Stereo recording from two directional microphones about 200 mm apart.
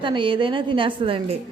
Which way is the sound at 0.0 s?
25° right (ahead or behind).